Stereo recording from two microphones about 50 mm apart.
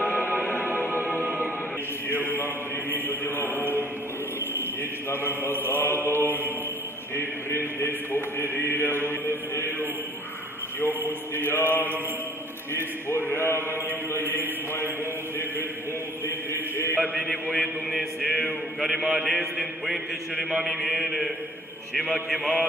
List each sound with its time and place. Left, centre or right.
2.1 s mantra: left
3.5 s chant: right
5.1 s chant: left
6.0 s mantra: left
7.2 s chant: left
11.1 s chant: left
14.1 s a man's voice: left
17.2 s mantra: centre
17.6 s a man's voice: centre
18.8 s mantra: centre